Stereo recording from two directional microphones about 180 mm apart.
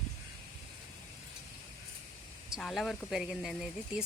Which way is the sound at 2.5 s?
Centre (ahead or behind).